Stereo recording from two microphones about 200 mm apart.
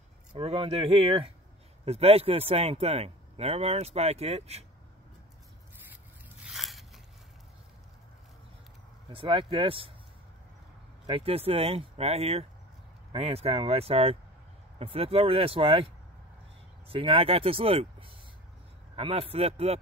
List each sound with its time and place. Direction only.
0.3 s speech: 30° right (ahead or behind)
6.4 s a sound: centre (ahead or behind)
9.1 s speech: 25° right (ahead or behind)
11.1 s speech: 30° right (ahead or behind)